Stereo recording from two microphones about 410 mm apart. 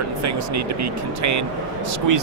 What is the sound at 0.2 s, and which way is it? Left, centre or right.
Speech, right.